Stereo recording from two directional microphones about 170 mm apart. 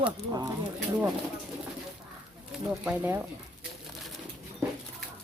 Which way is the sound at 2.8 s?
10° right (ahead or behind).